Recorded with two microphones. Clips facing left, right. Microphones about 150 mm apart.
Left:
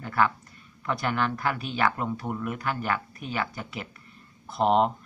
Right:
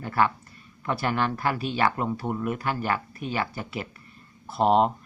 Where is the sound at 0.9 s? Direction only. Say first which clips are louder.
Right 1 dB; 5° right (ahead or behind).